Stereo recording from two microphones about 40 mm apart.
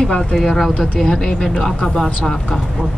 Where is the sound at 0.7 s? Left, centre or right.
Centre.